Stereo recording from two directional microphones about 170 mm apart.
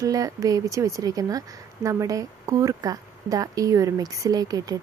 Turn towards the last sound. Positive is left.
turn(degrees=-20)  # may be behind; listen again after turning